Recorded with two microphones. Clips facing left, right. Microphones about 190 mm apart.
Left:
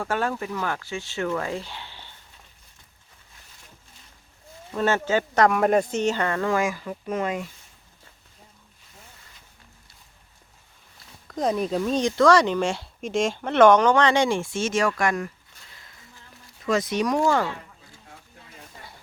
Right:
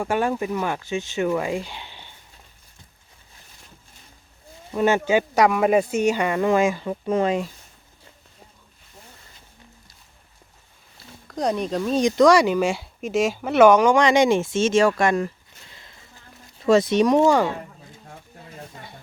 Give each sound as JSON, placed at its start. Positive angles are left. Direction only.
{"t": 0.0, "sound": "speech", "side_deg": -15}
{"t": 4.7, "sound": "speech", "side_deg": -15}
{"t": 11.3, "sound": "speech", "side_deg": 0}
{"t": 12.0, "sound": "speech", "side_deg": -15}
{"t": 15.8, "sound": "a sound", "side_deg": -25}
{"t": 16.6, "sound": "speech", "side_deg": -25}